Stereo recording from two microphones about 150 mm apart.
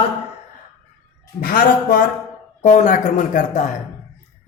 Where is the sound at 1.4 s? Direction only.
75° left (ahead or behind).